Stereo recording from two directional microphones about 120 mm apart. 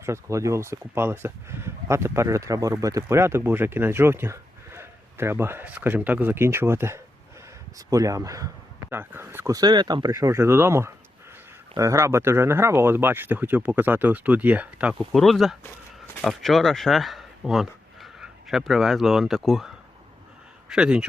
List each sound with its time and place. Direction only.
0.0 s speech: 25° right (ahead or behind)
8.9 s speech: 20° right (ahead or behind)
9.6 s speech: 35° right (ahead or behind); by 14.9 s 10° right (ahead or behind)
15.1 s speech: centre (ahead or behind)